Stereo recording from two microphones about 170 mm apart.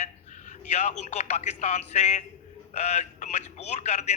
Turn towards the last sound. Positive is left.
turn(degrees=40)  # may be behind; listen again after turning